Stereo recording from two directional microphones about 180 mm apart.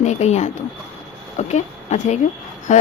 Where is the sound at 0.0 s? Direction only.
40° left (ahead or behind).